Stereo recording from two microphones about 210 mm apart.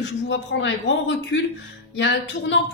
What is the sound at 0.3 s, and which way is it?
Speech, 65° left (ahead or behind).